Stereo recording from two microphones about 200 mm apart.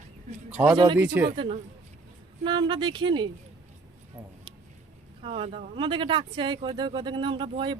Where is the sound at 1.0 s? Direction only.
10° right (ahead or behind).